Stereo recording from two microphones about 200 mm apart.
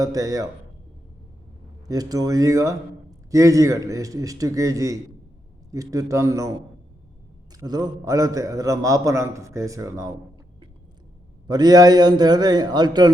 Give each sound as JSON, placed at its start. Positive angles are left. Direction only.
{"t": 0.0, "sound": "a man's voice", "side_deg": -15}
{"t": 1.9, "sound": "a man's voice", "side_deg": -20}
{"t": 7.5, "sound": "a man's voice", "side_deg": -20}
{"t": 11.4, "sound": "a man's voice", "side_deg": -20}